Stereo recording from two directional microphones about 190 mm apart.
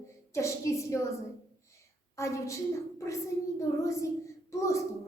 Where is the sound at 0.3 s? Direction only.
15° left (ahead or behind).